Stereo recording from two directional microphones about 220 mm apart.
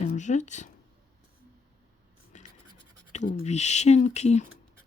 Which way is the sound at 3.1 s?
30° left (ahead or behind).